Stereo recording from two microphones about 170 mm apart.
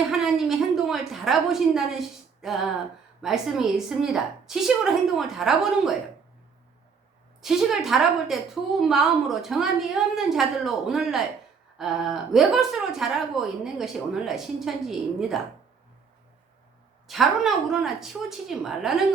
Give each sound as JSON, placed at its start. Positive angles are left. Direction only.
{"t": 0.1, "sound": "a sound", "side_deg": 0}
{"t": 3.2, "sound": "a woman's voice", "side_deg": 0}
{"t": 7.4, "sound": "a woman's voice", "side_deg": 0}
{"t": 17.1, "sound": "a woman's voice", "side_deg": 0}